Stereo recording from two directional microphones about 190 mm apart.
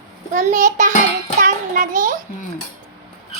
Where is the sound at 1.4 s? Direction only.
45° right (ahead or behind).